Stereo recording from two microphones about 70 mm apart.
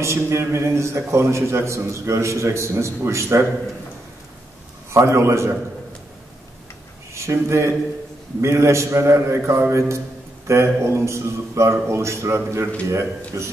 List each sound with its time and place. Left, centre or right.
0.0 s a man's voice: right
4.9 s a man's voice: right
7.2 s a man's voice: right